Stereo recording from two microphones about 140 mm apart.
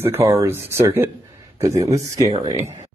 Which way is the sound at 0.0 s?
20° right (ahead or behind).